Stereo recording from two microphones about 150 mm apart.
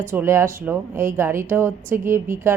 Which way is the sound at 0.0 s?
15° right (ahead or behind).